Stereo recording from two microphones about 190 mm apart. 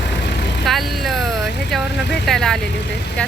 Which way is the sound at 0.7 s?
Centre (ahead or behind).